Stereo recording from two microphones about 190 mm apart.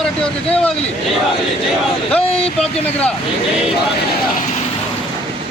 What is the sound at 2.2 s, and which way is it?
Speech, 30° left (ahead or behind).